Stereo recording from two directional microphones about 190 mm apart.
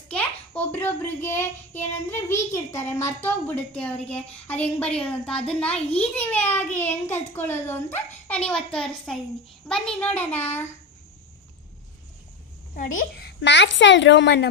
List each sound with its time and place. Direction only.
0.1 s a child's voice: 10° left (ahead or behind)
12.7 s a woman's voice: 45° left (ahead or behind); by 14.5 s 65° left (ahead or behind)